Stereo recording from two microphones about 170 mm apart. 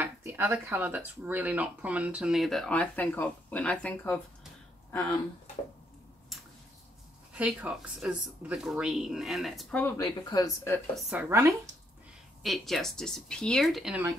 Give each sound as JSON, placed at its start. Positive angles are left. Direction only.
{"t": 0.0, "sound": "speech", "side_deg": -15}
{"t": 7.3, "sound": "speech", "side_deg": -5}
{"t": 9.9, "sound": "speech", "side_deg": 20}
{"t": 11.0, "sound": "speech", "side_deg": -5}
{"t": 11.2, "sound": "speech", "side_deg": -20}
{"t": 12.4, "sound": "speech", "side_deg": 0}